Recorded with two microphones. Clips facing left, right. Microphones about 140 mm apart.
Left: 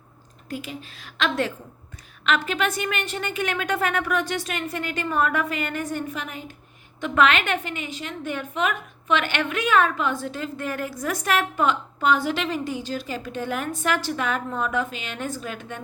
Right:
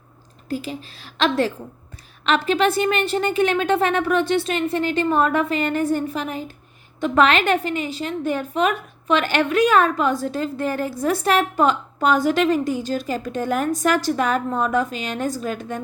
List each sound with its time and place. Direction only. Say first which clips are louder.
0.4 s a woman's voice: right 6 dB; 35° right (ahead or behind)